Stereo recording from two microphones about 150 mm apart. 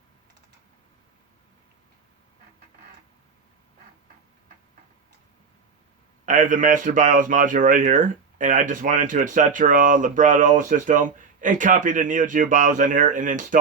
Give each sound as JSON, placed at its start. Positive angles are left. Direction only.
{"t": 6.2, "sound": "speech", "side_deg": -60}